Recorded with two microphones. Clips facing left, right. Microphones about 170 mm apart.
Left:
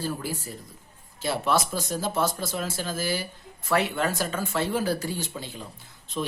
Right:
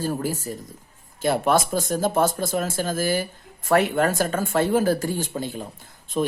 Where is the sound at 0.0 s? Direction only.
45° right (ahead or behind).